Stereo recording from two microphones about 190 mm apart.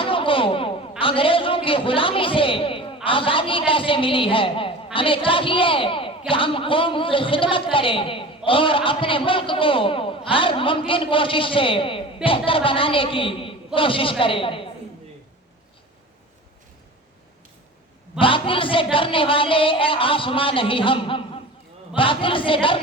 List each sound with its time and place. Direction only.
0.0 s a man's voice: 25° left (ahead or behind)
18.2 s a man's voice: 25° left (ahead or behind)